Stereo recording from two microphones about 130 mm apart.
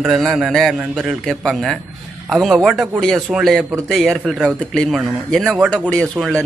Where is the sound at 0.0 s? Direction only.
Centre (ahead or behind).